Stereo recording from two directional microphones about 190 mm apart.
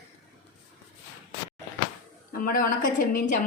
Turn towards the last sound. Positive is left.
turn(degrees=45)  # may be behind; listen again after turning